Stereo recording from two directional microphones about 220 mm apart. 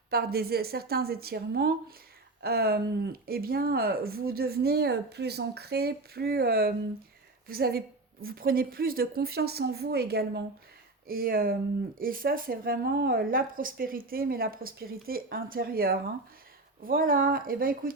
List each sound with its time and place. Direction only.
0.1 s speech: 45° right (ahead or behind)